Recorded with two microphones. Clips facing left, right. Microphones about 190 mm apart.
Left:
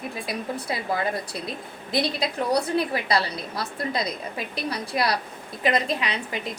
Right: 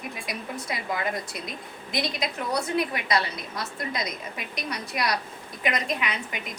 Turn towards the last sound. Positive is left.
turn(degrees=30)  # may be behind; listen again after turning